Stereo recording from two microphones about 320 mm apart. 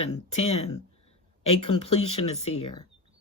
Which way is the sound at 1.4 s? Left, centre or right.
Left.